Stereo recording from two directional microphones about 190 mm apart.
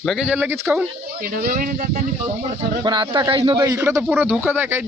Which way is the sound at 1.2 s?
50° right (ahead or behind).